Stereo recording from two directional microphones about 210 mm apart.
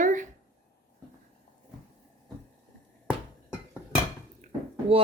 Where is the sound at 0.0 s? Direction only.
35° right (ahead or behind).